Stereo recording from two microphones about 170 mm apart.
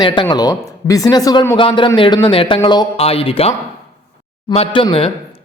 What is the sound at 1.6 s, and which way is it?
A man's voice, 30° left (ahead or behind).